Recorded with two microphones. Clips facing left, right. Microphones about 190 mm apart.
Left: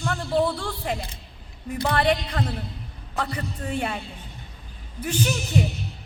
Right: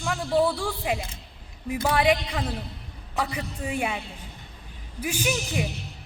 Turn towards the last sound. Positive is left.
turn(degrees=-10)  # may be behind; listen again after turning